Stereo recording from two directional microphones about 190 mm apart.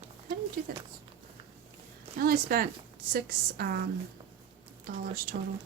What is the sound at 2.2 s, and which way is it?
A woman's voice, 50° right (ahead or behind).